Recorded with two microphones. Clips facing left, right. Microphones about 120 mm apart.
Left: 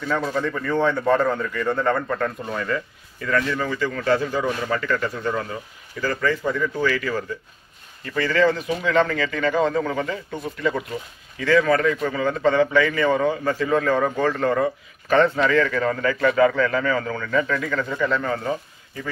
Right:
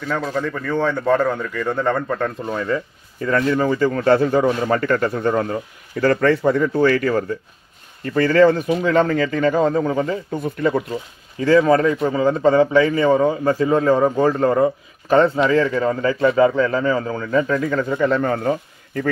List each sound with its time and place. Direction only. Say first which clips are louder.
0.1 s a man's voice: right 1 dB; centre (ahead or behind)
2.7 s a man's voice: right 4 dB; 30° right (ahead or behind)
5.9 s a man's voice: right 7 dB; 60° right (ahead or behind)
6.7 s a man's voice: right 7 dB; 50° right (ahead or behind); by 10.1 s 30° right (ahead or behind)
10.4 s speech: right 4 dB; 45° right (ahead or behind)
10.9 s a man's voice: right 4 dB; 35° right (ahead or behind)